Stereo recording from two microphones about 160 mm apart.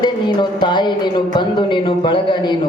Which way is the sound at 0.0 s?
30° left (ahead or behind).